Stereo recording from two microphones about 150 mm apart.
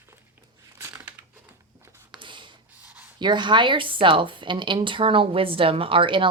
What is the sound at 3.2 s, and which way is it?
Speech, 30° right (ahead or behind).